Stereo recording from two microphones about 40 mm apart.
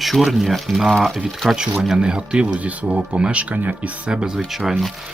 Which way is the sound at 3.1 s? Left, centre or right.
Right.